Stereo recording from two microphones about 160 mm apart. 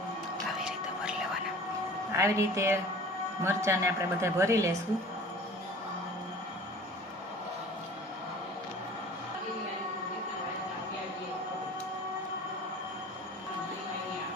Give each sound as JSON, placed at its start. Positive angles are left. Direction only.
{"t": 2.1, "sound": "a woman's voice", "side_deg": -15}